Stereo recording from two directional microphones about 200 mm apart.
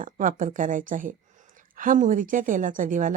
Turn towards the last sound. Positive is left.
turn(degrees=-40)  # may be behind; listen again after turning